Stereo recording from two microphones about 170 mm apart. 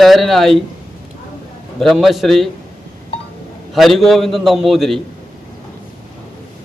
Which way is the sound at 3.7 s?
Centre (ahead or behind).